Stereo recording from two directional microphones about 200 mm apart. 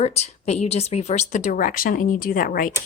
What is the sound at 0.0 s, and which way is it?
Speech, 30° left (ahead or behind).